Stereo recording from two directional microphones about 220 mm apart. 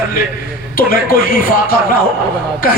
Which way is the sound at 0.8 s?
40° left (ahead or behind).